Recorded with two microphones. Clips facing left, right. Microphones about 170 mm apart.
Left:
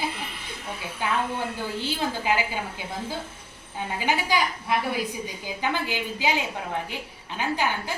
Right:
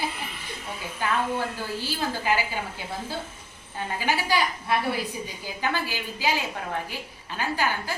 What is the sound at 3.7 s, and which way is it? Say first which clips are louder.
A woman's voice: left 1 dB; 15° left (ahead or behind).